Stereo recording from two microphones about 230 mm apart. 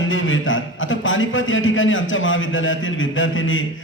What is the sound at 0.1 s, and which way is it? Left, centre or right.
A man's voice, left.